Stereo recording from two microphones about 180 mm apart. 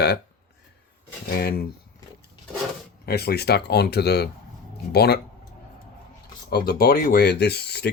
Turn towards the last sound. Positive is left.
turn(degrees=65)  # may be behind; listen again after turning